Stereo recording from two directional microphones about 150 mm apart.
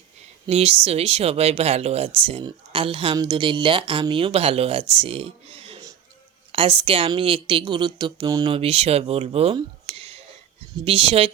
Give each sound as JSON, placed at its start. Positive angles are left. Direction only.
{"t": 0.4, "sound": "a woman's voice", "side_deg": -40}
{"t": 8.5, "sound": "speech", "side_deg": -40}